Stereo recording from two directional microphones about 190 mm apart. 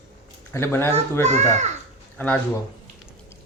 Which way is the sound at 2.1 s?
10° left (ahead or behind).